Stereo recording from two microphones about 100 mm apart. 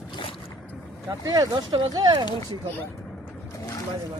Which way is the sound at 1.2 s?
40° right (ahead or behind).